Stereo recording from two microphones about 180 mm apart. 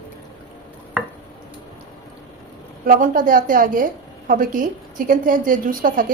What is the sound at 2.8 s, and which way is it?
A woman's voice, 50° right (ahead or behind).